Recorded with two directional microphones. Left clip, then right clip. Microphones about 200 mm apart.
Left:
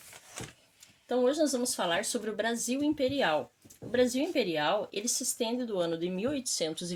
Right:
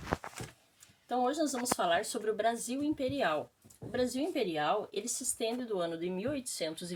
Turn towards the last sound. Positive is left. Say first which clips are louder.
# left 5 dB
turn(degrees=45)  # may be behind; listen again after turning